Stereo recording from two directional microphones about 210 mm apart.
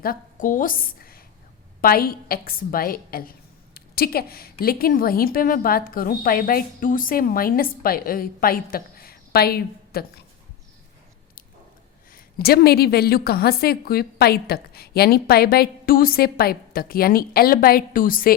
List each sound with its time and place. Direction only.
0.0 s a woman's voice: 40° left (ahead or behind)
12.1 s a woman's voice: 50° left (ahead or behind)